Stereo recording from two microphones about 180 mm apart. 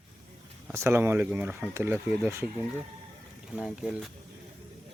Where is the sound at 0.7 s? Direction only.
15° right (ahead or behind).